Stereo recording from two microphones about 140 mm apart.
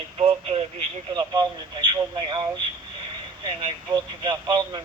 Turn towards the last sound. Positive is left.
turn(degrees=-30)  # may be behind; listen again after turning